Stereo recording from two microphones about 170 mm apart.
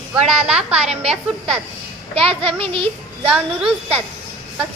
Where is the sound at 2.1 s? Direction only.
35° right (ahead or behind).